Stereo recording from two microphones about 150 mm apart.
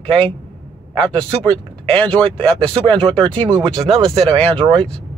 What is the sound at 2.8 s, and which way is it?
Speech, 35° right (ahead or behind).